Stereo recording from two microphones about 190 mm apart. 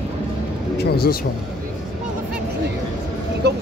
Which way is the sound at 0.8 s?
55° left (ahead or behind).